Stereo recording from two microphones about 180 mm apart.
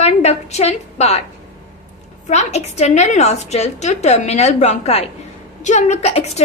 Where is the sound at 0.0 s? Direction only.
35° left (ahead or behind).